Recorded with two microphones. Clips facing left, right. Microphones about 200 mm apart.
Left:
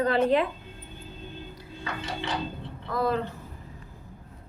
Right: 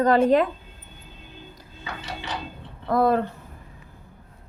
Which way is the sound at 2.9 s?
55° right (ahead or behind).